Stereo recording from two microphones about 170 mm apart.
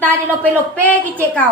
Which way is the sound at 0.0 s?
10° left (ahead or behind).